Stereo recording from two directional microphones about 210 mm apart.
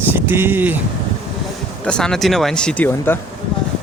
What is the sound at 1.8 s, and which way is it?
Speech, 5° left (ahead or behind).